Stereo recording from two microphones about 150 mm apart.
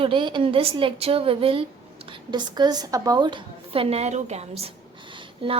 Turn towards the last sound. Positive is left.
turn(degrees=-35)  # may be behind; listen again after turning